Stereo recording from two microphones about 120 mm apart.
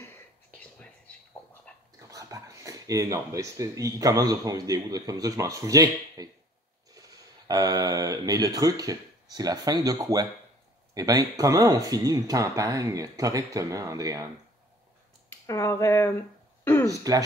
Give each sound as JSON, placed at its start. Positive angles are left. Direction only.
{"t": 0.0, "sound": "whispering", "side_deg": 15}
{"t": 2.0, "sound": "speech", "side_deg": -30}
{"t": 15.4, "sound": "speech", "side_deg": 25}
{"t": 16.6, "sound": "a sound", "side_deg": 20}
{"t": 16.9, "sound": "speech", "side_deg": -30}